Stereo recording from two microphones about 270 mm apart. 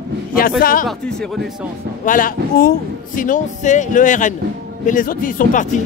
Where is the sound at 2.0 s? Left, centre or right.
Left.